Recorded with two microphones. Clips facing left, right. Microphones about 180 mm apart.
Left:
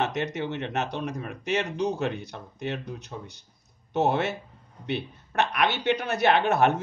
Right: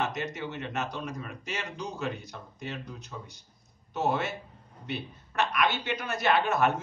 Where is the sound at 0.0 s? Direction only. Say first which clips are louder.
Left 4 dB; 65° left (ahead or behind).